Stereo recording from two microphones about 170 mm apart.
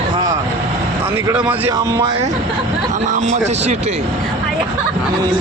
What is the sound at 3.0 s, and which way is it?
Speech, 45° right (ahead or behind).